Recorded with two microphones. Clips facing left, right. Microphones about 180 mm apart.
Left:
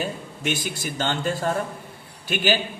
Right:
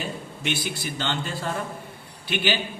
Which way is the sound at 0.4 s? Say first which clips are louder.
Left 2 dB; 45° left (ahead or behind).